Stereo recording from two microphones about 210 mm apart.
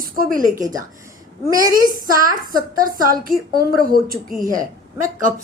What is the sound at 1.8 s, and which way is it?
A woman's voice, 40° right (ahead or behind).